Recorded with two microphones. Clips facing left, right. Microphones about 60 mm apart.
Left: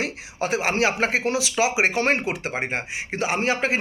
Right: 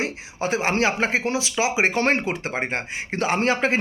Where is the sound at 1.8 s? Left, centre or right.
Right.